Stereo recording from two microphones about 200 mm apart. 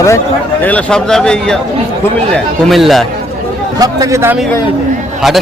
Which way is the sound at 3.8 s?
20° right (ahead or behind).